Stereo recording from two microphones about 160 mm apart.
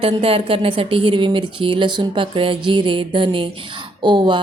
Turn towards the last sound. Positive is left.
turn(degrees=-30)  # may be behind; listen again after turning